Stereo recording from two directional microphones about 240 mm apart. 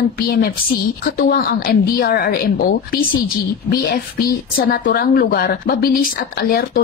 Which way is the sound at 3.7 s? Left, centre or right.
Left.